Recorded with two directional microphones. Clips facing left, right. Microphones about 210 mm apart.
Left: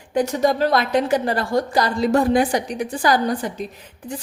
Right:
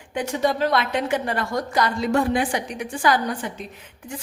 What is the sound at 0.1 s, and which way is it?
A woman's voice, 40° left (ahead or behind).